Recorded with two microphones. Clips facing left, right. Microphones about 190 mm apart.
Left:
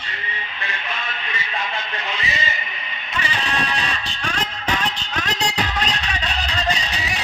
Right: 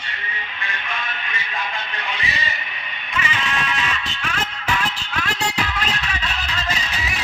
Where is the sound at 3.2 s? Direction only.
35° left (ahead or behind).